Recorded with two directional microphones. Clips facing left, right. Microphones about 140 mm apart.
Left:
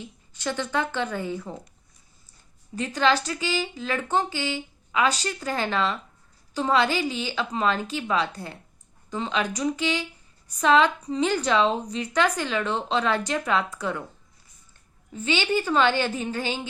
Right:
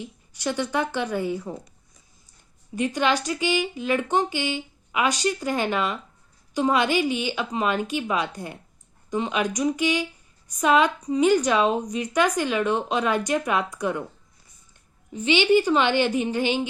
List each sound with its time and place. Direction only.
0.0 s a woman's voice: 15° right (ahead or behind)
2.7 s a woman's voice: 15° right (ahead or behind)
15.1 s a woman's voice: 15° right (ahead or behind)